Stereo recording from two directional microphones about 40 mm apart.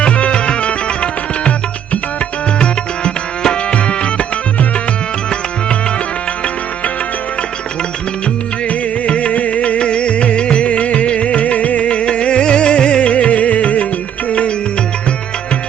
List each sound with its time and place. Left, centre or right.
0.0 s music: left
9.0 s music: left